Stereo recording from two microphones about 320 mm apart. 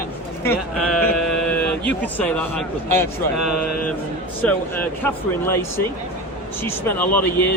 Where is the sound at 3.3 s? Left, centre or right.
Left.